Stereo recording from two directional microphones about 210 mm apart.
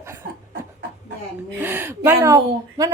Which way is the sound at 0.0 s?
10° right (ahead or behind).